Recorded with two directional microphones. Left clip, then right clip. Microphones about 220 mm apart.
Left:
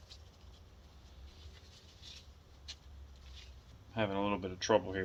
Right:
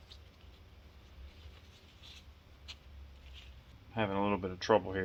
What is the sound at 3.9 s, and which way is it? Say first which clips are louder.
Speech: right 2 dB; 20° right (ahead or behind).